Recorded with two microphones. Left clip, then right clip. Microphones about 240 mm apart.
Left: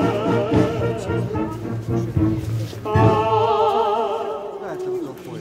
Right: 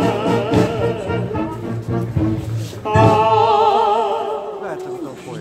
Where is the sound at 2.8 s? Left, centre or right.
Right.